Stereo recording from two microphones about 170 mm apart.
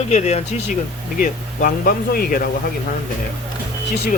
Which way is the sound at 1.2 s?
60° left (ahead or behind).